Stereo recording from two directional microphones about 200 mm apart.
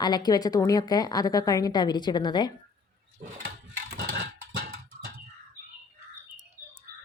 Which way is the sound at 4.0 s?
55° right (ahead or behind).